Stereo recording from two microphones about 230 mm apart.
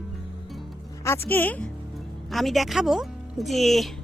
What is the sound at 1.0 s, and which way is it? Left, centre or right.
A woman's voice, centre.